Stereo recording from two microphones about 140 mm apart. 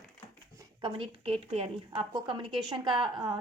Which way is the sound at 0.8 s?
40° right (ahead or behind).